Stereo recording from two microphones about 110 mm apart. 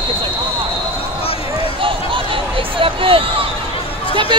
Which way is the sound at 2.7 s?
55° right (ahead or behind).